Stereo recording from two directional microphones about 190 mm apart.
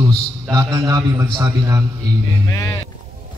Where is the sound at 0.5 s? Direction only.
20° right (ahead or behind).